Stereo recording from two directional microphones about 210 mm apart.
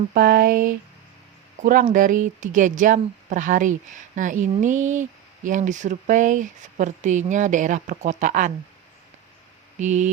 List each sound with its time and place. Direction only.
0.1 s speech: 45° right (ahead or behind)
9.7 s speech: 35° right (ahead or behind)